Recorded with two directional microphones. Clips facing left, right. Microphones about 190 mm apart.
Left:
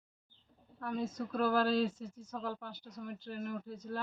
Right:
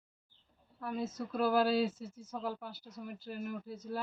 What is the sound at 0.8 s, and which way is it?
A woman's voice, 5° right (ahead or behind).